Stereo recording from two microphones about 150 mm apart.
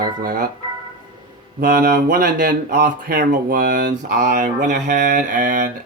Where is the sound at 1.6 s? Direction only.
80° right.